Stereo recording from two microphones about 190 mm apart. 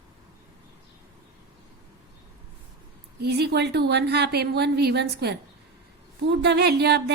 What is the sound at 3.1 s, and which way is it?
A woman's voice, 60° right (ahead or behind).